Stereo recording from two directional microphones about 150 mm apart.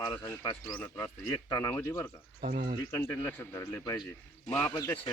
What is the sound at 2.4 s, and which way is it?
Speech, 70° right (ahead or behind).